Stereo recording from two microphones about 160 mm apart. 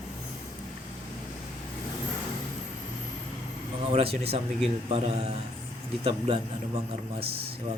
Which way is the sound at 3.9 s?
40° right (ahead or behind).